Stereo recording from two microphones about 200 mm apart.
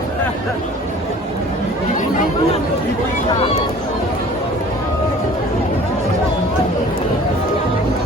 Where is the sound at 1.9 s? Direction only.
40° left (ahead or behind).